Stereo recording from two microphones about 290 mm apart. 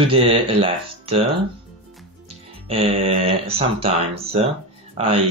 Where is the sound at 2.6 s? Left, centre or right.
Centre.